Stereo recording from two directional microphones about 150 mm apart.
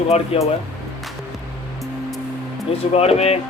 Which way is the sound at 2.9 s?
45° left (ahead or behind).